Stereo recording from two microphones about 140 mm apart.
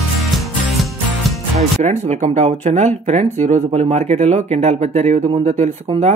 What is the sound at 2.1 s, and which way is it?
Speech, 55° right (ahead or behind).